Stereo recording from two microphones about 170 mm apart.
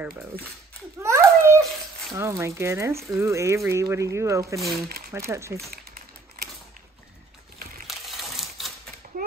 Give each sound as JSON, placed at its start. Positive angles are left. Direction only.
{"t": 1.0, "sound": "babbling", "side_deg": -15}
{"t": 2.1, "sound": "speech", "side_deg": -15}
{"t": 4.6, "sound": "speech", "side_deg": 0}
{"t": 4.8, "sound": "coin", "side_deg": -60}
{"t": 5.1, "sound": "speech", "side_deg": -15}
{"t": 5.7, "sound": "a sound", "side_deg": -60}
{"t": 7.8, "sound": "coin", "side_deg": 0}